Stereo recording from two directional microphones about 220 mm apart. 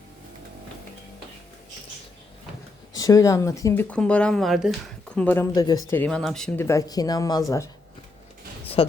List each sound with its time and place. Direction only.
2.9 s speech: 15° left (ahead or behind)
5.9 s speech: 5° left (ahead or behind)
8.8 s a woman's voice: 25° left (ahead or behind)